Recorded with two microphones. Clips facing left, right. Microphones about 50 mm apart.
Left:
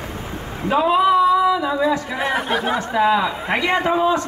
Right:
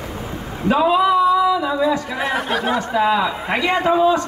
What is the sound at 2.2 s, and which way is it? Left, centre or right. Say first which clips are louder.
A man's voice: even; centre.